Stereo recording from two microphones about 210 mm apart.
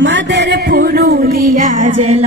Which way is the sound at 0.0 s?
60° right (ahead or behind).